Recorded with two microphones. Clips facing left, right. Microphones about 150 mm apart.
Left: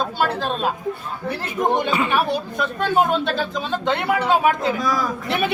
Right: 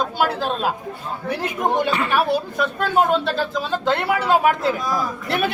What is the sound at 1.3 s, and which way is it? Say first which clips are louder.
Speech: left 1 dB; 5° right (ahead or behind).